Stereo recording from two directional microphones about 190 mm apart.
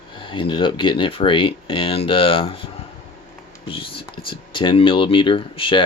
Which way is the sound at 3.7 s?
25° left (ahead or behind).